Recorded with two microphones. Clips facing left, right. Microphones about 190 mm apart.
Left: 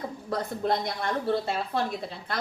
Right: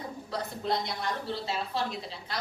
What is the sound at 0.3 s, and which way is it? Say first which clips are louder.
A woman's voice: left 5 dB; 50° left (ahead or behind).